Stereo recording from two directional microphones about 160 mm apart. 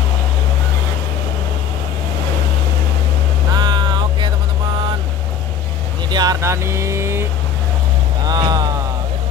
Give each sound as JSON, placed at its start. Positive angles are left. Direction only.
{"t": 3.5, "sound": "vehicle", "side_deg": -30}
{"t": 6.0, "sound": "vehicle", "side_deg": -25}
{"t": 8.3, "sound": "music", "side_deg": -25}